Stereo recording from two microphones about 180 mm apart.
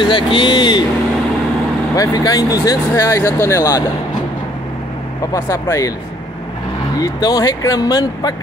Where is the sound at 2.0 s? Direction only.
20° left (ahead or behind).